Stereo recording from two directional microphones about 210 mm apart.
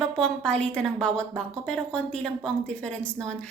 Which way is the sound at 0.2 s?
5° left (ahead or behind).